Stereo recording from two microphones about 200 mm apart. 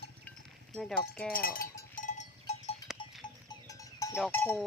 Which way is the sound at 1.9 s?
40° left (ahead or behind).